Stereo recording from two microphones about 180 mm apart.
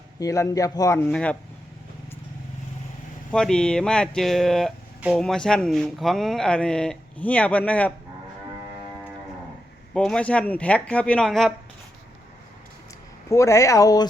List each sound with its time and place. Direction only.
0.2 s speech: 20° left (ahead or behind)
3.3 s speech: 5° left (ahead or behind)
9.9 s speech: 5° left (ahead or behind)
13.3 s speech: 15° left (ahead or behind)